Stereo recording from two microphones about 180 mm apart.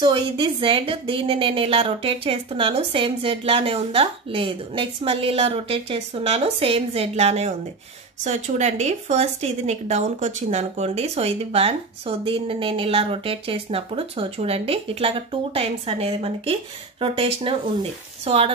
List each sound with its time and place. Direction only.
0.0 s a woman's voice: 25° right (ahead or behind)